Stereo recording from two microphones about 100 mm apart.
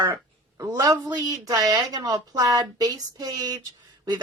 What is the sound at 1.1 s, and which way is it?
A woman's voice, 40° right (ahead or behind).